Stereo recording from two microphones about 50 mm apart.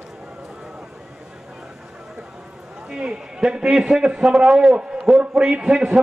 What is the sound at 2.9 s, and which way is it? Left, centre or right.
A man's voice, centre.